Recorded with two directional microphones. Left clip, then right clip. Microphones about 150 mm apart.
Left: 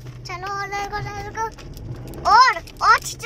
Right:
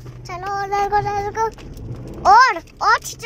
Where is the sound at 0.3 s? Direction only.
85° right.